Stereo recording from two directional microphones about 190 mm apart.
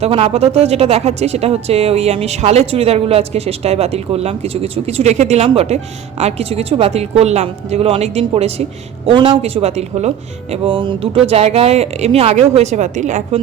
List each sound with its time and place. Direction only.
0.0 s speech: 30° right (ahead or behind)